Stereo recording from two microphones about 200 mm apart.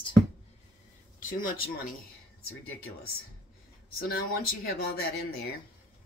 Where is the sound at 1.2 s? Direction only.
45° left (ahead or behind).